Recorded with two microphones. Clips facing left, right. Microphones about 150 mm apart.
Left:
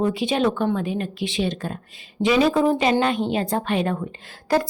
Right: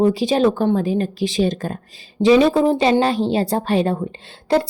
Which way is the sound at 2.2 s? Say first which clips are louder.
Right 5 dB; 30° right (ahead or behind).